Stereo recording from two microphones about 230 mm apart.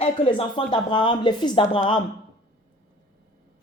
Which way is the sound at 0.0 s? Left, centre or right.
Left.